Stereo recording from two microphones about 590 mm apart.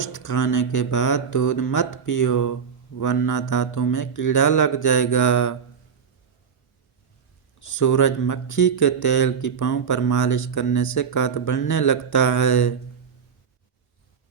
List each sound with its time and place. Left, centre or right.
0.0 s speech: left
7.7 s speech: left